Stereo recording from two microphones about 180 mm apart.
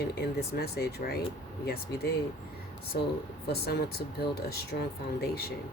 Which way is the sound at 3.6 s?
65° left (ahead or behind).